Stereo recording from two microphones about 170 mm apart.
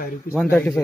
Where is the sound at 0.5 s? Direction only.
10° left (ahead or behind).